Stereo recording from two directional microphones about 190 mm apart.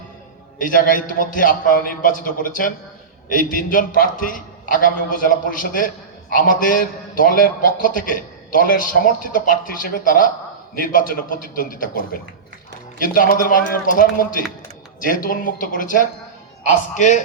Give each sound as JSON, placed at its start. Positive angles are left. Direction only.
{"t": 0.6, "sound": "a man's voice", "side_deg": 45}